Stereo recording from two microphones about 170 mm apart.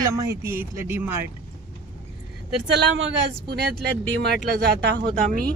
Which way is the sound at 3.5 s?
70° right (ahead or behind).